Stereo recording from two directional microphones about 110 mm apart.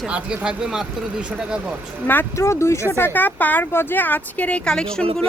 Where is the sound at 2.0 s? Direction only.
20° left (ahead or behind).